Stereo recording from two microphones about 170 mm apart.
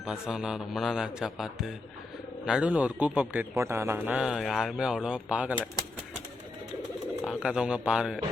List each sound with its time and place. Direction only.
0.0 s a man's voice: 5° right (ahead or behind)
7.3 s speech: 5° right (ahead or behind)